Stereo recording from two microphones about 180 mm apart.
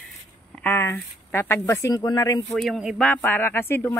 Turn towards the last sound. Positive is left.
turn(degrees=15)  # may be behind; listen again after turning